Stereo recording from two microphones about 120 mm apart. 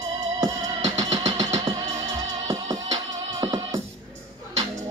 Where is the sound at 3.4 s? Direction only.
30° right (ahead or behind).